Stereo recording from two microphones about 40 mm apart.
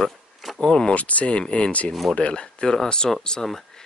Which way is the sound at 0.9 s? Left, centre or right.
Left.